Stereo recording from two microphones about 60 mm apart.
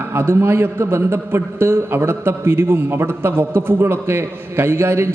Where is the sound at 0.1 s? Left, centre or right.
Right.